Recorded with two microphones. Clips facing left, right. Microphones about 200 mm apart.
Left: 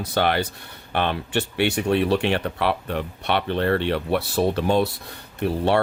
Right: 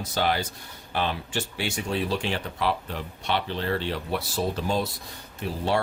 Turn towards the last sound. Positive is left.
turn(degrees=60)  # may be behind; listen again after turning